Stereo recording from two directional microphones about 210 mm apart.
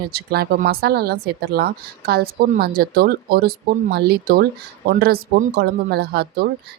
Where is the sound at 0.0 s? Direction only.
45° right (ahead or behind).